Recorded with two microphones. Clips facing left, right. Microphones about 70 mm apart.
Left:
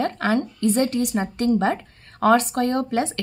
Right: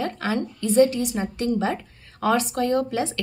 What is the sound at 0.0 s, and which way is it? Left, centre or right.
A woman's voice, left.